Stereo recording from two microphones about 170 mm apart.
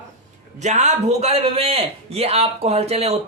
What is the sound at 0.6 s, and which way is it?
A man's voice, 45° right (ahead or behind).